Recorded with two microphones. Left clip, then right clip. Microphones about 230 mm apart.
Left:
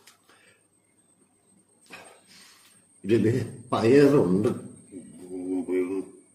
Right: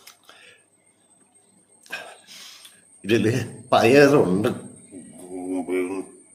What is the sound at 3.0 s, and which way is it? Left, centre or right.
Speech, centre.